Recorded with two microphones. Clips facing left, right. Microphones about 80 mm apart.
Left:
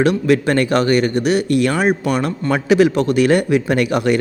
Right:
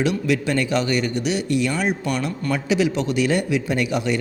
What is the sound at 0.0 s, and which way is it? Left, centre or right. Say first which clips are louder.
A man's voice: left 6 dB; left.